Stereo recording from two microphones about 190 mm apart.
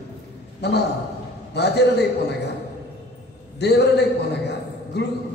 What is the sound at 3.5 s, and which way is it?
A man's voice, 60° left (ahead or behind).